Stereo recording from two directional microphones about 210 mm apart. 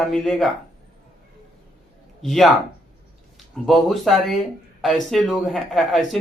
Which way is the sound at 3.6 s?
Centre (ahead or behind).